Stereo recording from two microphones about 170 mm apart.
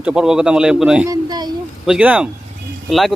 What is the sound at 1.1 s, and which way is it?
Speech, 25° right (ahead or behind).